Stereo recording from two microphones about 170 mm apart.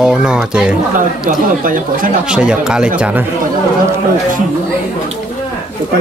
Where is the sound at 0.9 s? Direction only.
55° right (ahead or behind).